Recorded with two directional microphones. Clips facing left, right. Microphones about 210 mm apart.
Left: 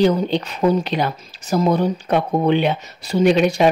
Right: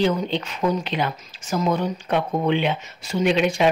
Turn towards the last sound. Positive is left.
turn(degrees=40)  # may be behind; listen again after turning